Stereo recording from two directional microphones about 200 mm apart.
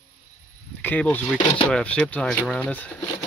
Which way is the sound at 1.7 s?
5° left (ahead or behind).